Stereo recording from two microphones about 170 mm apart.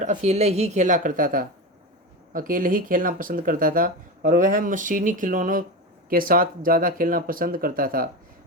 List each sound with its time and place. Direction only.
0.0 s speech: 45° right (ahead or behind)